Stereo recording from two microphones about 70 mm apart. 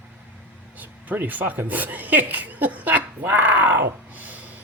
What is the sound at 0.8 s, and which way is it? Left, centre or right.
Speech, right.